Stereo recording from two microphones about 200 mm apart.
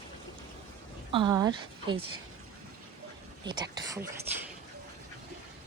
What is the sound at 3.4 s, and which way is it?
Speech, 20° right (ahead or behind).